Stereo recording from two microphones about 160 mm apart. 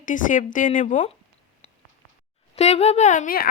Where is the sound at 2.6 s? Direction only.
45° left (ahead or behind); by 3.5 s 65° left (ahead or behind).